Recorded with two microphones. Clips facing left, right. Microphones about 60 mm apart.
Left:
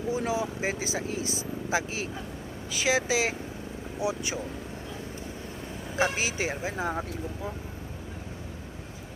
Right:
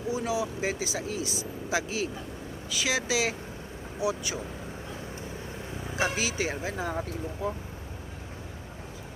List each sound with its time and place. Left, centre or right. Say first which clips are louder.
0.1 s speech: even; left
6.0 s speech: left 1 dB; left